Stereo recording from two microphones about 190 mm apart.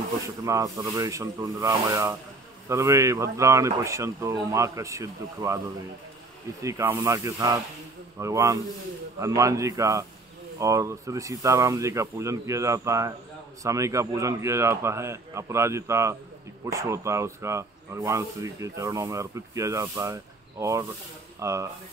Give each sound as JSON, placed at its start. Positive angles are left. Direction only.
{"t": 0.4, "sound": "speech", "side_deg": -15}
{"t": 6.6, "sound": "speech", "side_deg": -15}